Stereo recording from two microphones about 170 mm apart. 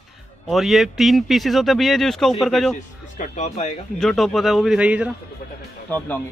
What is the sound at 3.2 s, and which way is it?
Speech, 40° left (ahead or behind).